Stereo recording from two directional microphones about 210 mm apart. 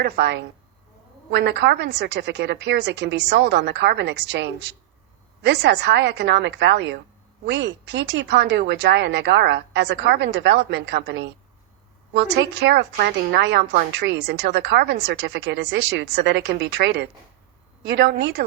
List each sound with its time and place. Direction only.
0.0 s a woman's voice: 50° right (ahead or behind)